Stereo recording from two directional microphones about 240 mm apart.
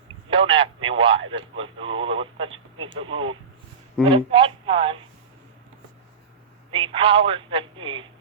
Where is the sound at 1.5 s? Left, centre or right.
Right.